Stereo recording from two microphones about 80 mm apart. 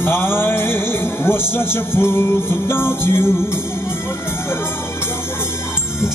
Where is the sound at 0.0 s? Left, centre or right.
Left.